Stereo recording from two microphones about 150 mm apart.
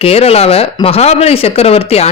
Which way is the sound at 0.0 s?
40° left (ahead or behind).